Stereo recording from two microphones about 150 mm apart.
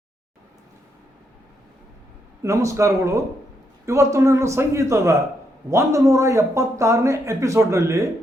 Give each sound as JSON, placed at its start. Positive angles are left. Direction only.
{"t": 2.4, "sound": "a man's voice", "side_deg": -20}